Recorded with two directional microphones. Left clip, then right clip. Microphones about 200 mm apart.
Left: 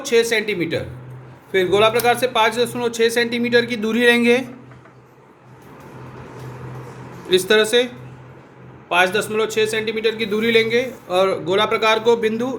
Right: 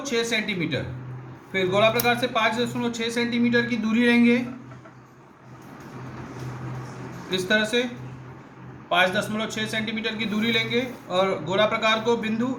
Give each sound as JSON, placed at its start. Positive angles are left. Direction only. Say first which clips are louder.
{"t": 0.0, "sound": "a man's voice", "louder": "left 8 dB", "side_deg": 50}
{"t": 7.3, "sound": "a man's voice", "louder": "left 8 dB", "side_deg": 50}
{"t": 8.9, "sound": "a man's voice", "louder": "left 4 dB", "side_deg": 50}